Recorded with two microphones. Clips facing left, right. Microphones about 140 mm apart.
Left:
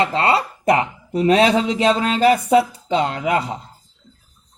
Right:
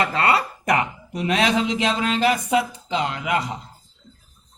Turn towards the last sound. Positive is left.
turn(degrees=30)  # may be behind; listen again after turning